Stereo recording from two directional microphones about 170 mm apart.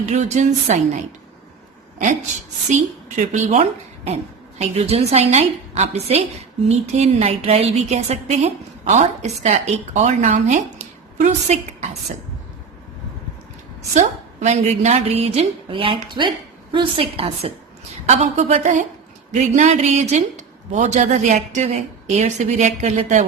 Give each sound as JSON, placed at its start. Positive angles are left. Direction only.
{"t": 0.1, "sound": "a woman's voice", "side_deg": -45}
{"t": 2.7, "sound": "a woman's voice", "side_deg": -45}
{"t": 13.9, "sound": "a woman's voice", "side_deg": -40}